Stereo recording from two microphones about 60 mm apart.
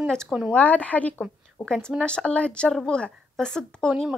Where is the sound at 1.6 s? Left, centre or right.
Centre.